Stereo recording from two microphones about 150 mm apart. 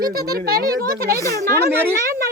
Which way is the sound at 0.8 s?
75° right (ahead or behind).